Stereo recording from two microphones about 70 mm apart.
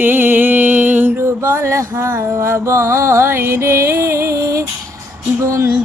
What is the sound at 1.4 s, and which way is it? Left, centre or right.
Music, right.